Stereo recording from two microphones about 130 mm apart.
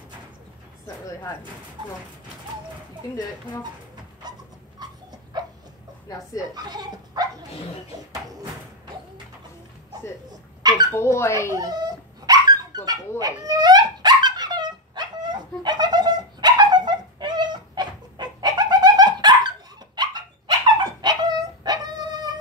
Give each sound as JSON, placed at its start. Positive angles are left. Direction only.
{"t": 6.0, "sound": "speech", "side_deg": 25}
{"t": 6.5, "sound": "speech", "side_deg": -30}
{"t": 10.3, "sound": "dog", "side_deg": -30}
{"t": 10.9, "sound": "speech", "side_deg": 20}
{"t": 11.5, "sound": "dog", "side_deg": -30}